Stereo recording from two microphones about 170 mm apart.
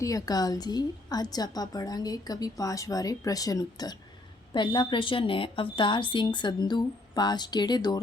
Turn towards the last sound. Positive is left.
turn(degrees=25)  # may be behind; listen again after turning